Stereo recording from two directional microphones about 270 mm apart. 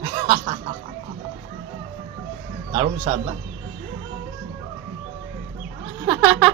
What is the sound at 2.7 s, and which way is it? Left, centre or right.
Speech, centre.